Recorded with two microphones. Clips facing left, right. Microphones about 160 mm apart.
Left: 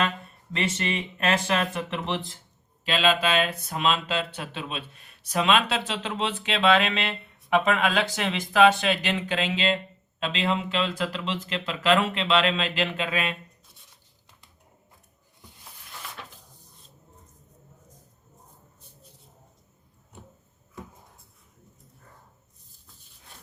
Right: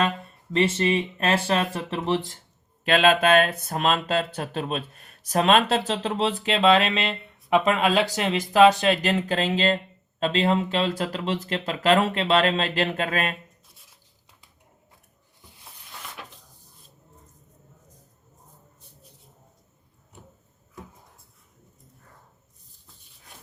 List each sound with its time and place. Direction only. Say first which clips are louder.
0.8 s speech: right 6 dB; 30° right (ahead or behind)
2.8 s speech: right 5 dB; 55° right (ahead or behind); by 6.7 s 40° right (ahead or behind)
6.7 s speech: right 2 dB; centre (ahead or behind)
7.6 s speech: right 3 dB; 35° right (ahead or behind)
13.7 s a sound: even; centre (ahead or behind)
16.2 s a sound: right 1 dB; 5° right (ahead or behind)